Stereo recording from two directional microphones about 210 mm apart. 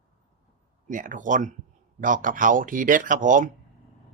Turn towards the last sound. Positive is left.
turn(degrees=-40)  # may be behind; listen again after turning